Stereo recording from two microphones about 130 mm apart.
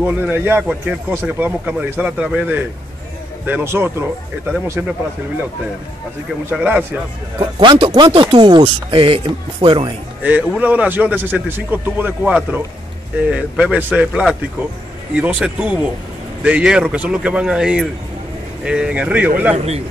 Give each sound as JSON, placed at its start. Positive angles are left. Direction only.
{"t": 0.0, "sound": "a man's voice", "side_deg": -15}
{"t": 6.5, "sound": "speech", "side_deg": -10}
{"t": 7.3, "sound": "speech", "side_deg": -40}
{"t": 10.2, "sound": "speech", "side_deg": -10}
{"t": 19.5, "sound": "a man's voice", "side_deg": -55}